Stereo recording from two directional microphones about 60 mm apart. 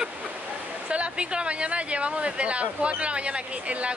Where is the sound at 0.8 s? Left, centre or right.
Centre.